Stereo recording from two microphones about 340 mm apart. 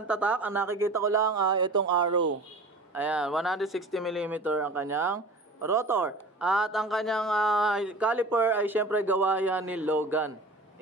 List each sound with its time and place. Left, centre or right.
0.1 s speech: centre
2.0 s speech: right
2.9 s speech: centre